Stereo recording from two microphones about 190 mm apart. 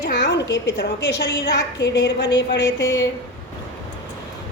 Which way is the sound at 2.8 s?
15° left (ahead or behind).